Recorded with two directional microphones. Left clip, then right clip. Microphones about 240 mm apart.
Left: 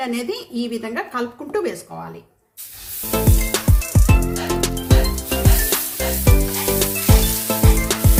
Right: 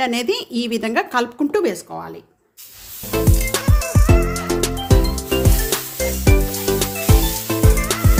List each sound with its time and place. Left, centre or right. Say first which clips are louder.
0.0 s speech: right 5 dB; right
3.2 s music: right 1 dB; centre